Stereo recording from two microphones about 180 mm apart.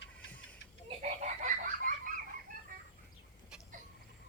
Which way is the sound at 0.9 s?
40° right (ahead or behind).